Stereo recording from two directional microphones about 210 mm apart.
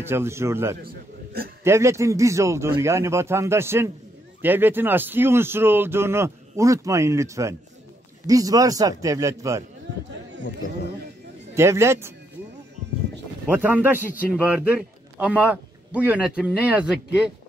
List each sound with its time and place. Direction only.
0.0 s a man's voice: 10° right (ahead or behind)
0.8 s a man's voice: 45° right (ahead or behind)
1.6 s a man's voice: 15° right (ahead or behind)
11.5 s a man's voice: 10° right (ahead or behind)
13.5 s a man's voice: 10° right (ahead or behind)